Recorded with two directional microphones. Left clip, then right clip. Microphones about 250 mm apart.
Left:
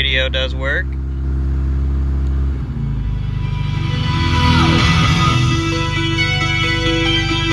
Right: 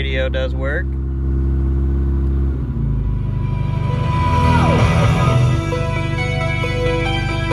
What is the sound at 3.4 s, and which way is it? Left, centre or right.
Music, centre.